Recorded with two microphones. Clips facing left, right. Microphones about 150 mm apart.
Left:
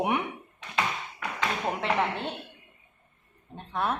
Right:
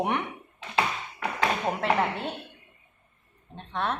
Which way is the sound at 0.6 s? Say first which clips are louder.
Right 3 dB; 30° right (ahead or behind).